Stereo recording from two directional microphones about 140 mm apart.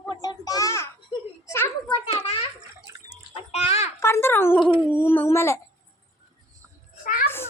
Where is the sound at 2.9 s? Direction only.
20° right (ahead or behind).